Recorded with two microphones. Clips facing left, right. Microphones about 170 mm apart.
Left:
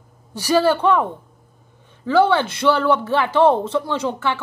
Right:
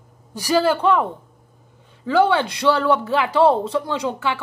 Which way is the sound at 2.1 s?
15° right (ahead or behind).